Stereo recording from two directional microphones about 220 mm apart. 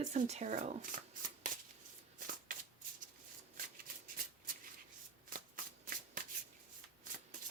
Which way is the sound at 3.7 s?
40° right (ahead or behind).